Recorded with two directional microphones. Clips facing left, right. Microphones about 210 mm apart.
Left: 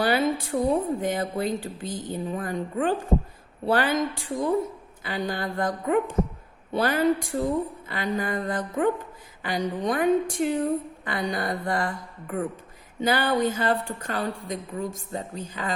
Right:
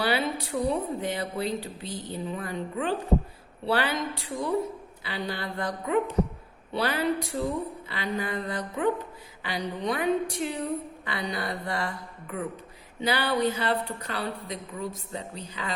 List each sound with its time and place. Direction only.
0.0 s a woman's voice: 45° left (ahead or behind)